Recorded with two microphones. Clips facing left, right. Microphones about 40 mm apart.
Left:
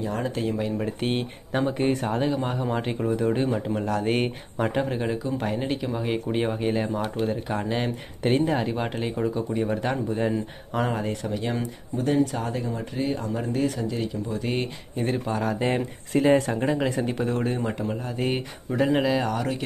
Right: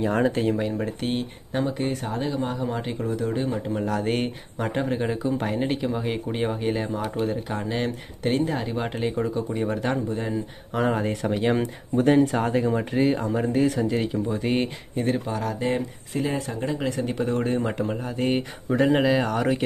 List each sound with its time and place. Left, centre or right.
0.3 s speech: centre
0.6 s speech: centre
1.0 s speech: centre
3.6 s speech: centre
11.2 s speech: right
13.0 s speech: right
13.3 s speech: centre
13.8 s speech: right
14.4 s speech: centre
15.0 s speech: centre
16.3 s speech: left
17.0 s speech: centre
18.7 s speech: centre